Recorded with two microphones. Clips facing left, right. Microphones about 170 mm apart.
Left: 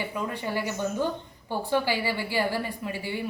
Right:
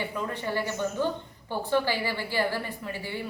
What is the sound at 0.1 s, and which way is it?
A woman's voice, 10° left (ahead or behind).